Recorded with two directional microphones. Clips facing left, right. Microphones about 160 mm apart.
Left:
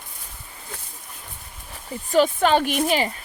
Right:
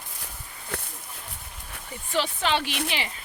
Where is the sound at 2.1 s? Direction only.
45° left (ahead or behind).